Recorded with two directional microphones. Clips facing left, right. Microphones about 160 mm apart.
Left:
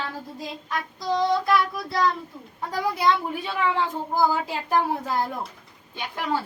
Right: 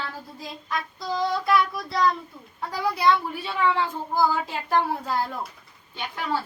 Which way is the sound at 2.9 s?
15° left (ahead or behind).